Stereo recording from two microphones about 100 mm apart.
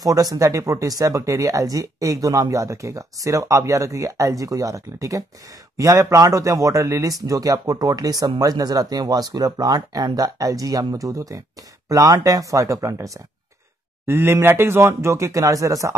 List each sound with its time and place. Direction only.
0.0 s speech: 35° right (ahead or behind)